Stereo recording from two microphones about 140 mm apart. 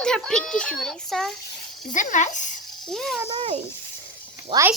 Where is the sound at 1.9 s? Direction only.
65° left (ahead or behind).